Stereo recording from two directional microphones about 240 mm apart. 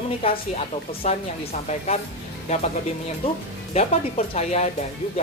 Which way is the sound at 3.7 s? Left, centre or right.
Left.